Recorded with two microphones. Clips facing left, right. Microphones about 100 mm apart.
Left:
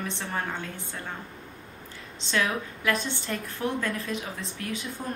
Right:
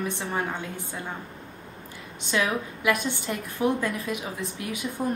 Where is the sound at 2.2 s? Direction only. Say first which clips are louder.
Right 2 dB; 15° right (ahead or behind).